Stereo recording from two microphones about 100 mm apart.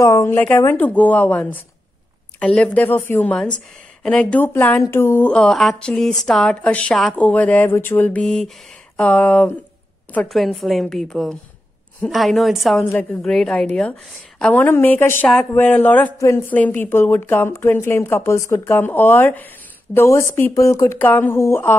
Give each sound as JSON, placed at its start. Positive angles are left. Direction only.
{"t": 0.0, "sound": "speech", "side_deg": 30}
{"t": 5.3, "sound": "a woman's voice", "side_deg": 5}
{"t": 8.2, "sound": "a woman's voice", "side_deg": 10}
{"t": 21.0, "sound": "speech", "side_deg": 20}